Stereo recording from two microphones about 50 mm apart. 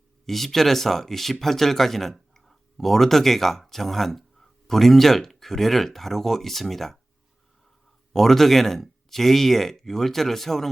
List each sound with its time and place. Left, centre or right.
0.3 s speech: centre
8.1 s speech: centre